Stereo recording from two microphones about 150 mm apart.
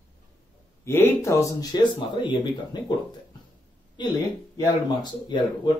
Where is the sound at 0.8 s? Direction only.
15° left (ahead or behind).